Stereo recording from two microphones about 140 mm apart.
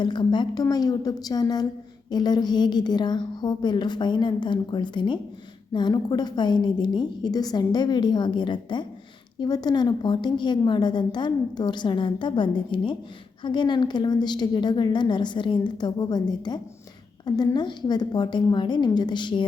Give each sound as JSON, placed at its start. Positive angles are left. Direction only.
{"t": 0.0, "sound": "a woman's voice", "side_deg": 35}